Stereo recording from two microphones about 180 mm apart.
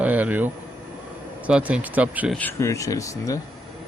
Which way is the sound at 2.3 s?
10° left (ahead or behind).